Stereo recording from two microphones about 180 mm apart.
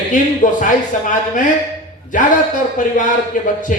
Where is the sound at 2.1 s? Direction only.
45° left (ahead or behind).